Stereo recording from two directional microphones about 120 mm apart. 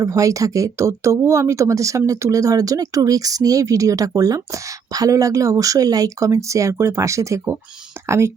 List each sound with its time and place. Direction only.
0.0 s speech: 30° right (ahead or behind)